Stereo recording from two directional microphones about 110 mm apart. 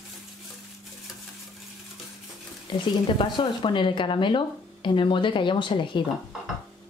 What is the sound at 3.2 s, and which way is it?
Speech, 50° left (ahead or behind).